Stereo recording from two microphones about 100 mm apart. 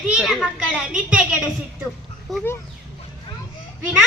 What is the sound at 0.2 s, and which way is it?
A child's voice, centre (ahead or behind).